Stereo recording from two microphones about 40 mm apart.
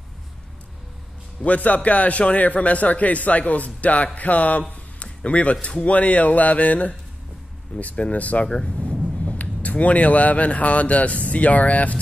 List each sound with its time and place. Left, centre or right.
1.4 s a man's voice: left
4.9 s music: left
5.9 s a man's voice: left
8.5 s speech: left